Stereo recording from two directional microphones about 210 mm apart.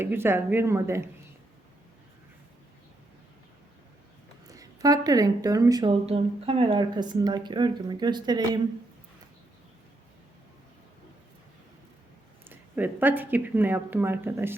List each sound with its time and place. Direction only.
0.0 s speech: 10° right (ahead or behind)
4.4 s speech: 15° right (ahead or behind)
12.5 s speech: 10° right (ahead or behind)